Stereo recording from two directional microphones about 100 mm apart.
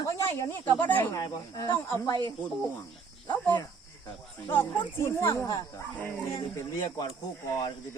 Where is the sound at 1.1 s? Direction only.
35° left (ahead or behind).